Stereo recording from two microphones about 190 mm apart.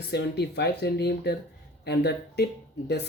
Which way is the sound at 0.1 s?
60° left (ahead or behind).